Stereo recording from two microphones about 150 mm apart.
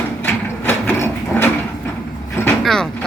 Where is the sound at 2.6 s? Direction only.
5° left (ahead or behind).